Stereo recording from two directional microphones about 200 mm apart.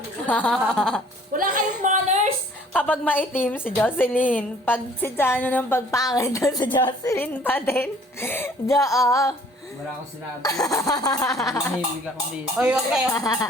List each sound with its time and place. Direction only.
0.3 s speech: 5° left (ahead or behind)
1.3 s female singing: 40° right (ahead or behind)
2.7 s a woman's voice: 5° left (ahead or behind)
10.4 s a woman's voice: 15° left (ahead or behind)
12.5 s speech: 5° right (ahead or behind)
13.1 s a woman's voice: 15° left (ahead or behind)